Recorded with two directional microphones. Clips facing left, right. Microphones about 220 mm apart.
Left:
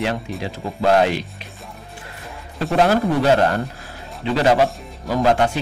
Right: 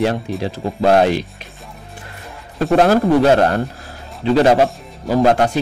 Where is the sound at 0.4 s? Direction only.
40° right (ahead or behind).